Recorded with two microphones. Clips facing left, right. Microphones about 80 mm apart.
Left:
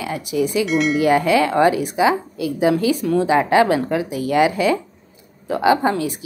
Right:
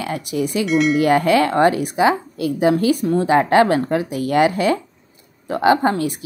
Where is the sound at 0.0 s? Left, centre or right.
Right.